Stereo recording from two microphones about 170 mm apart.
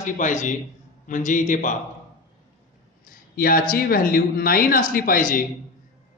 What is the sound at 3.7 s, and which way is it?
Speech, 60° left (ahead or behind).